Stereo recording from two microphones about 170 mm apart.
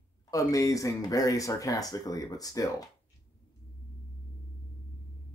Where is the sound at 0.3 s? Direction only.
20° left (ahead or behind).